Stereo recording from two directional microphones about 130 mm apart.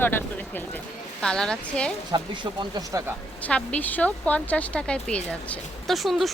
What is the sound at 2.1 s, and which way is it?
Speech, 35° right (ahead or behind).